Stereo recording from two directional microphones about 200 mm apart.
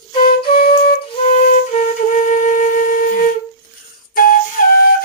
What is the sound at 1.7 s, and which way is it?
Flute, 40° left (ahead or behind).